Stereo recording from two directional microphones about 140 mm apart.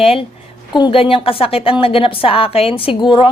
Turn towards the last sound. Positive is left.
turn(degrees=40)  # may be behind; listen again after turning